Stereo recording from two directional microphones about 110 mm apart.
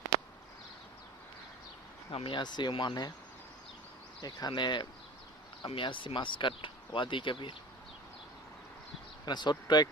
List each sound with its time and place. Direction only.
2.0 s speech: 50° left (ahead or behind)
4.2 s speech: 35° left (ahead or behind)
9.2 s speech: 40° left (ahead or behind)